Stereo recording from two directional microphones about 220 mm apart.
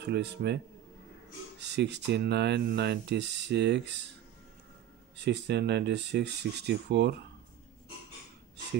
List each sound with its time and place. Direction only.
0.0 s speech: 50° right (ahead or behind)
1.6 s speech: 50° right (ahead or behind)
5.2 s speech: 50° right (ahead or behind)